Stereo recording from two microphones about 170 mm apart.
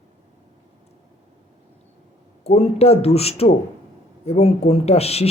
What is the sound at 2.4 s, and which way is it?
Speech, 35° left (ahead or behind).